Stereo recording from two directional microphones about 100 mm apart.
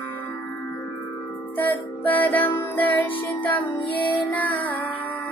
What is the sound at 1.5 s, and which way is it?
Music, 15° left (ahead or behind).